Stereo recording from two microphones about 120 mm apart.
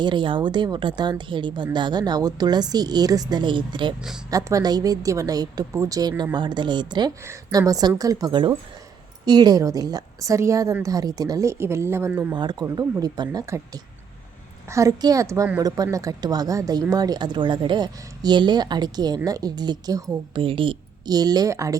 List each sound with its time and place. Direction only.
0.0 s speech: 40° right (ahead or behind)
4.3 s a woman's voice: 30° right (ahead or behind)
7.3 s a woman's voice: 25° right (ahead or behind)
12.3 s speech: 35° right (ahead or behind)
13.4 s a woman's voice: 25° right (ahead or behind)
20.4 s a woman's voice: 45° right (ahead or behind)
21.1 s speech: 35° right (ahead or behind)